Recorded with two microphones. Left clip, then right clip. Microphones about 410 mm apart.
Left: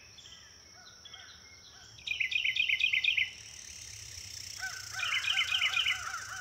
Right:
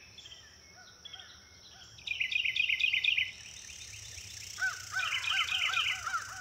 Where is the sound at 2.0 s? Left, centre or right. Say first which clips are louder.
Left 1 dB; centre.